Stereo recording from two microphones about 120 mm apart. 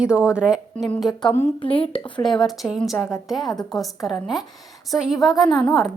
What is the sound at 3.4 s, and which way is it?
Speech, 35° left (ahead or behind).